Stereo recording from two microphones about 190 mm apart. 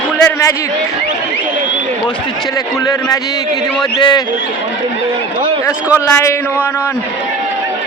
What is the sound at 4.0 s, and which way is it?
Speech, 25° left (ahead or behind).